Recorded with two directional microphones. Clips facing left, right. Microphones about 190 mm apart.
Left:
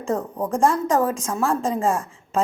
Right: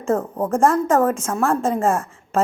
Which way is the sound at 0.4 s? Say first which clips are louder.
Right 3 dB; 50° right (ahead or behind).